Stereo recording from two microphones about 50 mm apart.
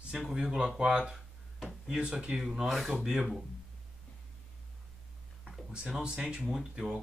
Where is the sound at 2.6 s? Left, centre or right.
Centre.